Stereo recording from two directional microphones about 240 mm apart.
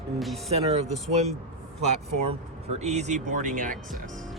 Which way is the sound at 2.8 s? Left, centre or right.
Right.